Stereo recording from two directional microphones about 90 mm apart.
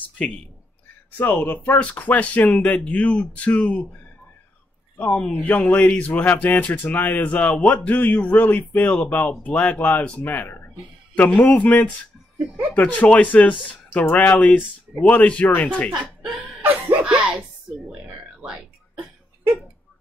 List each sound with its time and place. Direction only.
1.1 s speech: 20° left (ahead or behind)
5.1 s speech: 5° left (ahead or behind)
5.7 s speech: 15° left (ahead or behind)
11.3 s speech: 10° left (ahead or behind)
16.6 s a sound: 15° right (ahead or behind)